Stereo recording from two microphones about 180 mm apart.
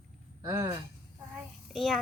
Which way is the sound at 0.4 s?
20° right (ahead or behind).